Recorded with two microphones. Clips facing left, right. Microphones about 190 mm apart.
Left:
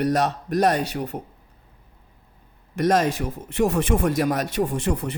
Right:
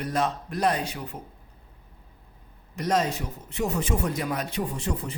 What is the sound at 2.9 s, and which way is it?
A man's voice, 65° left (ahead or behind).